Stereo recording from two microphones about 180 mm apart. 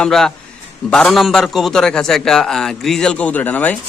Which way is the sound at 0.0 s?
5° left (ahead or behind).